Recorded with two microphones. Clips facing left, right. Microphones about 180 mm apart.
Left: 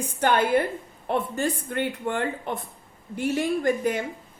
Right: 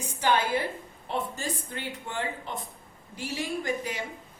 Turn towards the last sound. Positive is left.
turn(degrees=55)  # may be behind; listen again after turning